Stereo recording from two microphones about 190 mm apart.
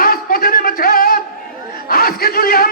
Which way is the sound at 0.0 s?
50° left (ahead or behind).